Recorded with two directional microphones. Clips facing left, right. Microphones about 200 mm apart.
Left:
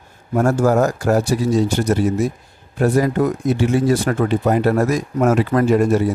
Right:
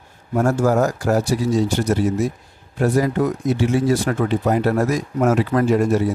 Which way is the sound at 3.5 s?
50° left (ahead or behind).